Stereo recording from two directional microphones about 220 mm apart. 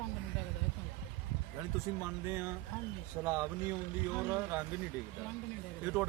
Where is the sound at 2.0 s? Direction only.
10° right (ahead or behind).